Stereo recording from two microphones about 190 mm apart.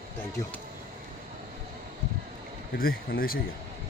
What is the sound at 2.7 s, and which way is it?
Speech, 50° left (ahead or behind).